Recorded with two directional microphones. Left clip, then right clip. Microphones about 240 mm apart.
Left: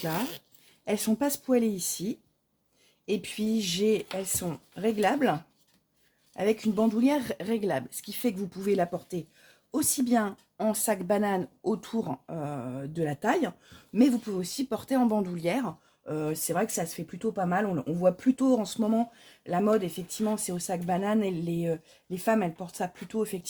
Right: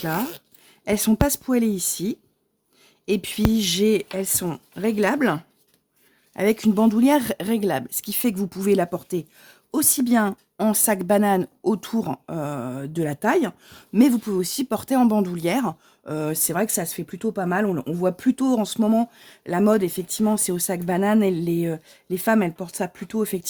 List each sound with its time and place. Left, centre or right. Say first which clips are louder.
0.0 s speech: right 6 dB; right